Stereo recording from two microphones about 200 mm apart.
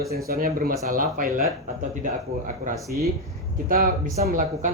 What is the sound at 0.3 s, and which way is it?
Speech, 50° right (ahead or behind).